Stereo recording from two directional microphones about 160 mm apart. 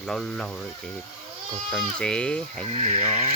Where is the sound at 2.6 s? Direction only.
35° right (ahead or behind).